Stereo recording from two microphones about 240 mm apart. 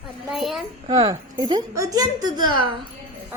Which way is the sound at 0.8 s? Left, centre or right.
Centre.